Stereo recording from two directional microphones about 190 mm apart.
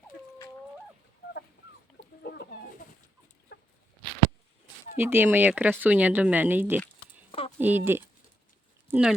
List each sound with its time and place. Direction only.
3.5 s chicken: 60° left (ahead or behind)
4.9 s speech: 10° right (ahead or behind)
7.3 s a sound: 30° left (ahead or behind)
7.6 s speech: 10° right (ahead or behind)